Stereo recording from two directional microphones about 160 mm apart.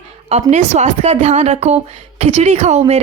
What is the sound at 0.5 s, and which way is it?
Speech, 45° right (ahead or behind).